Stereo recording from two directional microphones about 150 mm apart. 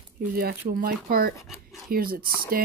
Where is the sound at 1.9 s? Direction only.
80° right.